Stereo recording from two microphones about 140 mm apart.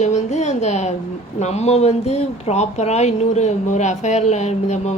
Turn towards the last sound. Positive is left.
turn(degrees=55)  # may be behind; listen again after turning